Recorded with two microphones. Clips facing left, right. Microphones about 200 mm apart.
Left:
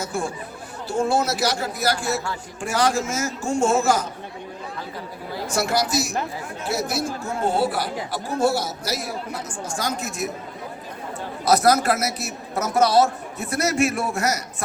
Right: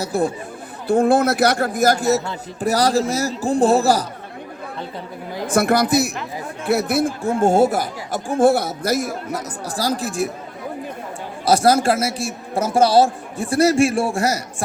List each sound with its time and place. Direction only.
0.0 s a man's voice: 35° right (ahead or behind)
0.9 s a man's voice: 55° right (ahead or behind); by 4.0 s 35° right (ahead or behind)
5.5 s a man's voice: 55° right (ahead or behind); by 10.2 s 30° right (ahead or behind)
11.4 s a man's voice: 30° right (ahead or behind)